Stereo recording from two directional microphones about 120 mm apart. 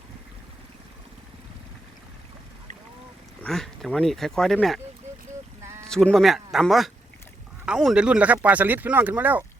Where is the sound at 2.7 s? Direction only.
80° right.